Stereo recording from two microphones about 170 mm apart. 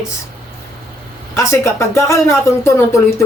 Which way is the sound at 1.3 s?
15° left (ahead or behind).